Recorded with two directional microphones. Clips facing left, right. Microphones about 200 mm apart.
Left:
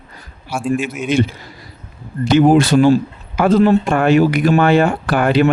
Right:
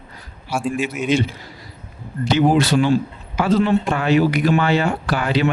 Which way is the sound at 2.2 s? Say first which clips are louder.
Left 5 dB; 50° left (ahead or behind).